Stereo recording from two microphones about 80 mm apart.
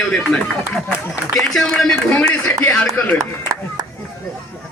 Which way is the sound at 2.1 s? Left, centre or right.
Left.